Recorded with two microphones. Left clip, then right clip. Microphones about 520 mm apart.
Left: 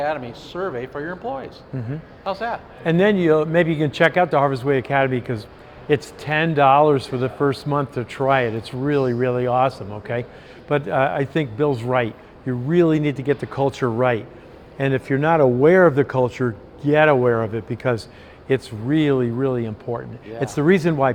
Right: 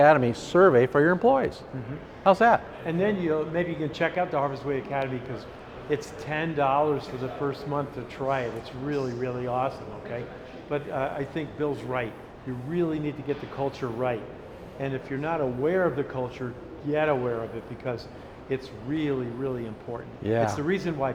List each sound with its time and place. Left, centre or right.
0.0 s speech: right
2.8 s speech: left
18.4 s speech: left